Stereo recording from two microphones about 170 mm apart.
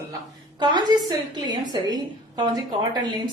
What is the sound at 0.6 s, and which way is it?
A woman's voice, 25° right (ahead or behind).